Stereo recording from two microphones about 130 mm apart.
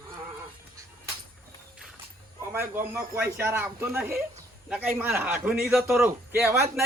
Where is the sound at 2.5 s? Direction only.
15° right (ahead or behind).